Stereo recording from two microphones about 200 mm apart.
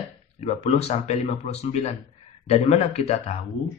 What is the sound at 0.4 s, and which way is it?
Speech, 35° left (ahead or behind).